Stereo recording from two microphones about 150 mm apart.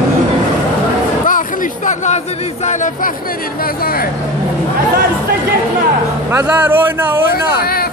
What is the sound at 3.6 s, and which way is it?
Music, 80° left.